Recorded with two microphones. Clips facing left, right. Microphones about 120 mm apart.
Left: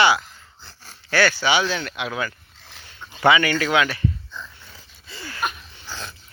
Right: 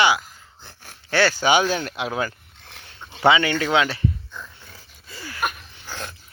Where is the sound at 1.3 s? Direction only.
45° right (ahead or behind).